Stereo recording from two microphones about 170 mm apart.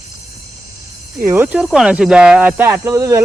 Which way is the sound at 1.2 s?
15° right (ahead or behind).